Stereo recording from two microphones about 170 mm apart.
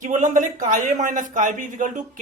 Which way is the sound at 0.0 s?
45° right (ahead or behind).